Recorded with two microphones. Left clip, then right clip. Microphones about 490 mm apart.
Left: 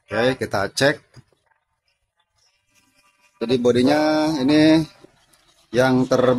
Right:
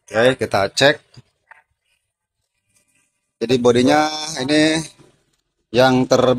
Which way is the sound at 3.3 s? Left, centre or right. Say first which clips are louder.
Right 3 dB; left.